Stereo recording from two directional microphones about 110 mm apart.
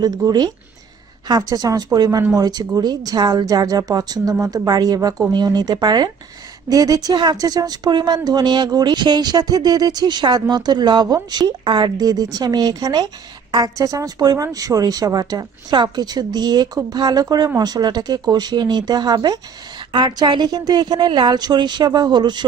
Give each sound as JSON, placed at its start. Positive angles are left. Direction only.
{"t": 0.3, "sound": "speech", "side_deg": -35}